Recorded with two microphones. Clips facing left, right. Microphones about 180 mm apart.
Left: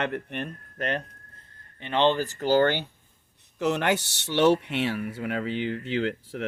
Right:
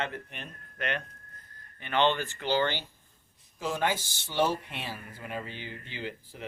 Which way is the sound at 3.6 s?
70° left (ahead or behind).